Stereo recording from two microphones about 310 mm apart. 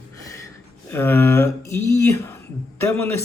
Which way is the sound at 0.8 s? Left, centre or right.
Centre.